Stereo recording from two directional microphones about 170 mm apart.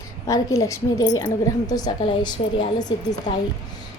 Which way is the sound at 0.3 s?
20° left (ahead or behind).